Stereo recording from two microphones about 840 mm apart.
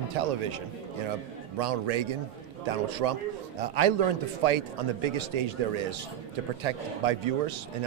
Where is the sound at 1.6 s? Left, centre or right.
Right.